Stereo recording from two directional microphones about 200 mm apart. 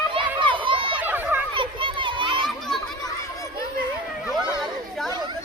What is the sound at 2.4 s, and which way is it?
Children playing, centre (ahead or behind).